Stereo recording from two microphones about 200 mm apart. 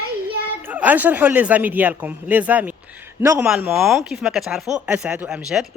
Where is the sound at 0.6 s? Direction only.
10° right (ahead or behind).